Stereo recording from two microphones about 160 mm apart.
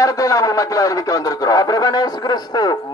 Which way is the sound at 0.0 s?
20° left (ahead or behind).